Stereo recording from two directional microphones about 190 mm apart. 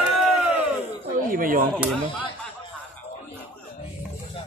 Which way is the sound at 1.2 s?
45° right (ahead or behind).